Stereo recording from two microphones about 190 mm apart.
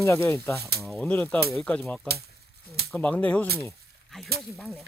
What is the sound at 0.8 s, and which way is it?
Speech, 5° left (ahead or behind).